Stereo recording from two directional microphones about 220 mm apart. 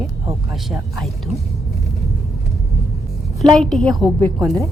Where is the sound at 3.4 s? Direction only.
Centre (ahead or behind).